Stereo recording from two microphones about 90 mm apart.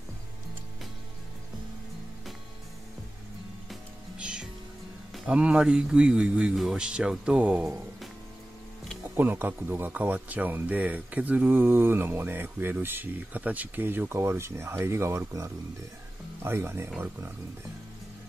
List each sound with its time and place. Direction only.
4.2 s music: 10° right (ahead or behind)
5.3 s a man's voice: 10° right (ahead or behind)
9.1 s speech: 20° right (ahead or behind)